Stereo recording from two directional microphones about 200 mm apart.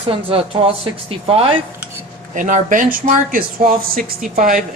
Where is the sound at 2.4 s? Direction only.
40° right (ahead or behind).